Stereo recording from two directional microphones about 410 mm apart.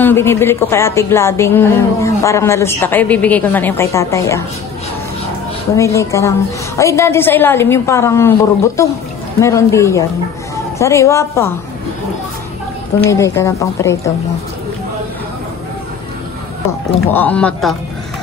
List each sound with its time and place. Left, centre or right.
0.0 s speech: centre
5.8 s speech: centre
13.1 s speech: centre
17.1 s speech: centre